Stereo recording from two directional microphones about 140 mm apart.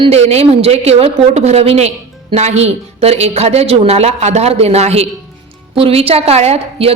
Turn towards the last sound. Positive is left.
turn(degrees=-45)  # may be behind; listen again after turning